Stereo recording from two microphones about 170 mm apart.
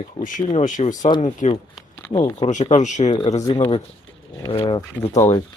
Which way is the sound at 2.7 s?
45° left (ahead or behind).